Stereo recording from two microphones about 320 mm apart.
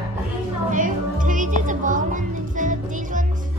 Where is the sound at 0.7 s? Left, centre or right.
Right.